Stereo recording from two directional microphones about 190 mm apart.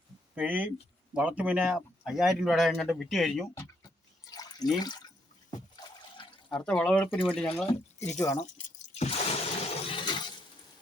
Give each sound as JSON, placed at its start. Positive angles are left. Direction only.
{"t": 0.3, "sound": "speech", "side_deg": -10}
{"t": 3.5, "sound": "water", "side_deg": 20}
{"t": 5.5, "sound": "trickle", "side_deg": 20}
{"t": 6.5, "sound": "speech", "side_deg": 5}
{"t": 8.5, "sound": "water", "side_deg": 35}